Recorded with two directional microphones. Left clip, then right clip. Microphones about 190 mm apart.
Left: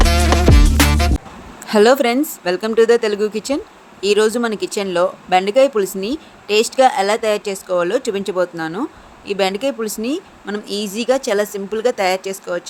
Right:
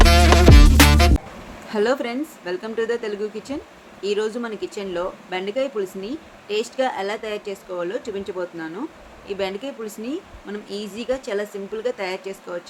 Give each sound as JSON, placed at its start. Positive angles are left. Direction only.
{"t": 0.0, "sound": "music", "side_deg": 0}
{"t": 1.6, "sound": "speech", "side_deg": 60}